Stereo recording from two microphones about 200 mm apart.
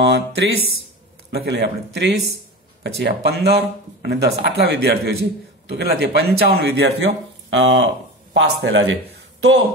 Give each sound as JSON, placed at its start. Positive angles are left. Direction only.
{"t": 0.0, "sound": "speech", "side_deg": -60}